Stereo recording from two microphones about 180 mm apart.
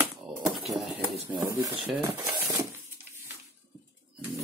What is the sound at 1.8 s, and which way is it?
Speech, 10° right (ahead or behind).